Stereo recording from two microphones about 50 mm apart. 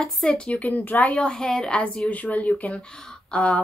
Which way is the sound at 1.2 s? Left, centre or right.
Centre.